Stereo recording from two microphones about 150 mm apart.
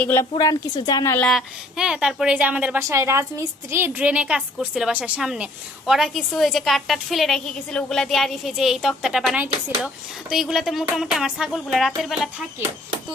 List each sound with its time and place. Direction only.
0.0 s a woman's voice: 15° left (ahead or behind)
1.2 s a woman's voice: centre (ahead or behind)